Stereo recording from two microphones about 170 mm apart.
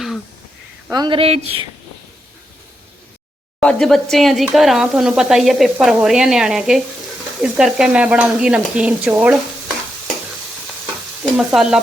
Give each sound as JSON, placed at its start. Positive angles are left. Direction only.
{"t": 0.9, "sound": "speech", "side_deg": -25}
{"t": 3.6, "sound": "sizzle", "side_deg": 5}
{"t": 7.4, "sound": "stir", "side_deg": -5}
{"t": 11.2, "sound": "stir", "side_deg": -5}